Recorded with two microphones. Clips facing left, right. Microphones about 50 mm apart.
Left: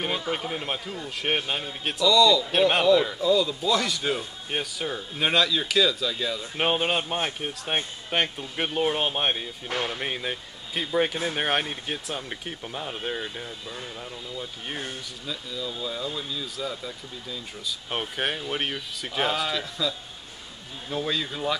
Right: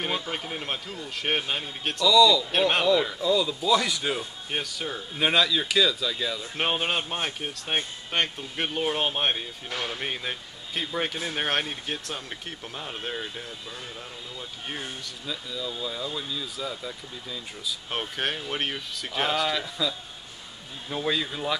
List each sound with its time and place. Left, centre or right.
0.3 s a man's voice: centre
9.8 s speech: centre
10.0 s a man's voice: centre